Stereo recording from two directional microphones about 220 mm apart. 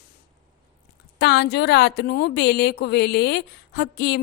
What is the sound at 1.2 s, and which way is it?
A woman's voice, 50° left (ahead or behind).